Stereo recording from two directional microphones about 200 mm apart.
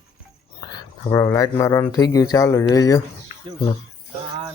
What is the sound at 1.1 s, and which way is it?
Speech, 15° left (ahead or behind).